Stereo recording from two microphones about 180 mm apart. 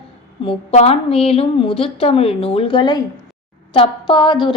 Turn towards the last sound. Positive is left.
turn(degrees=25)  # may be behind; listen again after turning